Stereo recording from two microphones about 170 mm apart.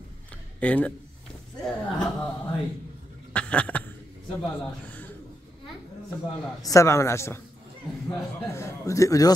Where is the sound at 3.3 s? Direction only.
5° left (ahead or behind).